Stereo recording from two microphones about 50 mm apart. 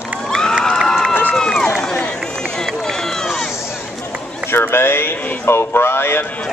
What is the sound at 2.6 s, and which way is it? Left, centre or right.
Run, centre.